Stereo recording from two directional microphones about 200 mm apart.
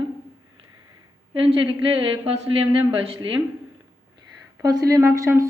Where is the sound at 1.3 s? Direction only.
25° right (ahead or behind).